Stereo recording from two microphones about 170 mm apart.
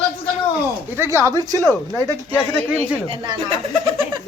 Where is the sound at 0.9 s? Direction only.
15° right (ahead or behind).